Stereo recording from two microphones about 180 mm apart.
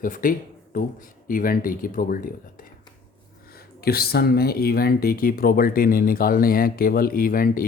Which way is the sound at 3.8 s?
60° left (ahead or behind).